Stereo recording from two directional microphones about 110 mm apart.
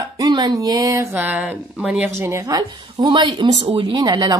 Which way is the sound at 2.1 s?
25° right (ahead or behind).